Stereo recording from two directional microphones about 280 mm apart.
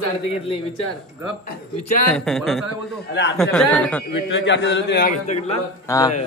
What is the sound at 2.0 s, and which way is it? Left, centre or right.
Speech, centre.